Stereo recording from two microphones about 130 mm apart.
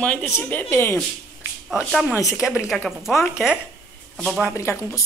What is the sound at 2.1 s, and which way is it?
Speech, 25° left (ahead or behind).